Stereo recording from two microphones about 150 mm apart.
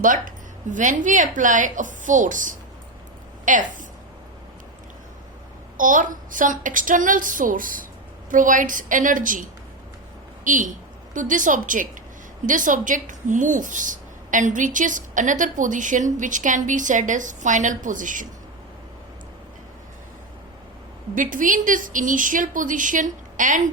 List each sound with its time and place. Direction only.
0.0 s speech: 60° right (ahead or behind)
5.7 s speech: 60° right (ahead or behind)
21.2 s speech: 60° right (ahead or behind)